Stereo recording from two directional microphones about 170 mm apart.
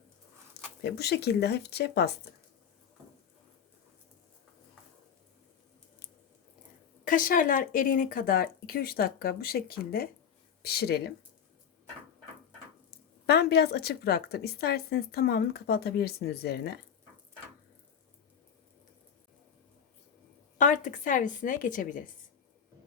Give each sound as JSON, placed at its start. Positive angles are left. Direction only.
{"t": 0.8, "sound": "a woman's voice", "side_deg": 75}
{"t": 7.0, "sound": "a woman's voice", "side_deg": 55}
{"t": 13.2, "sound": "a woman's voice", "side_deg": 70}
{"t": 20.6, "sound": "a woman's voice", "side_deg": 45}